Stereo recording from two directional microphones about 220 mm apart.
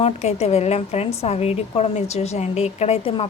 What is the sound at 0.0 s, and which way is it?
A woman's voice, 30° left (ahead or behind).